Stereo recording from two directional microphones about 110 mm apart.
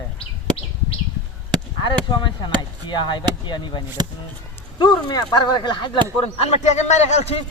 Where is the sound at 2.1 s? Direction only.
45° left (ahead or behind).